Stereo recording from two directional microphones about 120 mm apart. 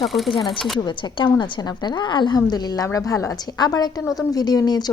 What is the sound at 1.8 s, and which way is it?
A woman's voice, 35° left (ahead or behind).